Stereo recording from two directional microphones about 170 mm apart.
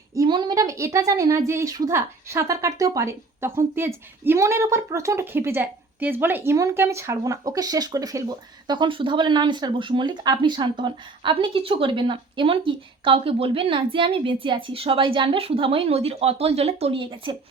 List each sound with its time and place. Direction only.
0.1 s speech: 25° right (ahead or behind)